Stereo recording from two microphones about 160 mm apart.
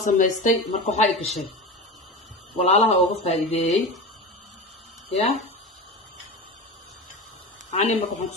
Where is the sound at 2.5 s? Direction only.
40° left (ahead or behind).